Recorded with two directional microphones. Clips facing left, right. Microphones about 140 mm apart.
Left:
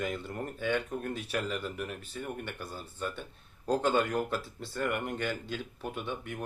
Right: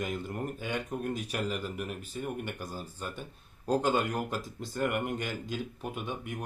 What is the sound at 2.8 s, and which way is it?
Speech, 40° right (ahead or behind).